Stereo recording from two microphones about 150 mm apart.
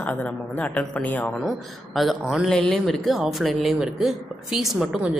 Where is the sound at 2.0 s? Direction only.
Centre (ahead or behind).